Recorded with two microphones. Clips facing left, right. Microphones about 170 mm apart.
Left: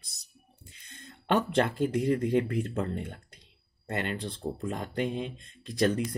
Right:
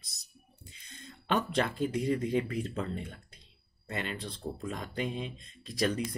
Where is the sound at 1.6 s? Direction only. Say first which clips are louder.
Left 3 dB; 60° left (ahead or behind).